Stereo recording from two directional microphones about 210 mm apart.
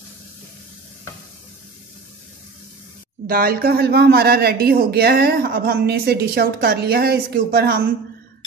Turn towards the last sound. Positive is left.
turn(degrees=-45)  # may be behind; listen again after turning